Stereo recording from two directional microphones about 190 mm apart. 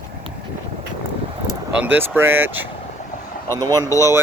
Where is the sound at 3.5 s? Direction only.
20° right (ahead or behind).